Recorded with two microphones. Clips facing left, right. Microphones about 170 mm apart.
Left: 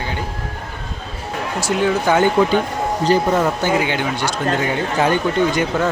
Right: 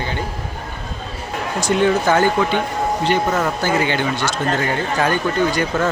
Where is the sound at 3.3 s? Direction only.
15° left (ahead or behind).